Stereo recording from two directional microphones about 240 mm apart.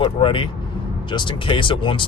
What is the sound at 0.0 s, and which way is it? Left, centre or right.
Speech, left.